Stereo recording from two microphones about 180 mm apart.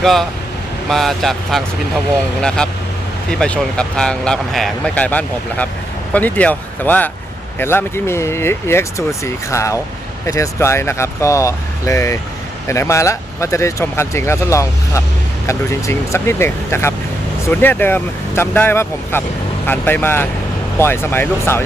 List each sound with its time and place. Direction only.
0.0 s speech: centre (ahead or behind)